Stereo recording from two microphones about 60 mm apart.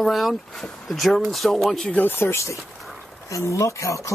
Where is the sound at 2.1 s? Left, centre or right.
Left.